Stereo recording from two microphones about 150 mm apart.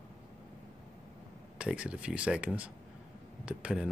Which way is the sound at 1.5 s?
10° right (ahead or behind).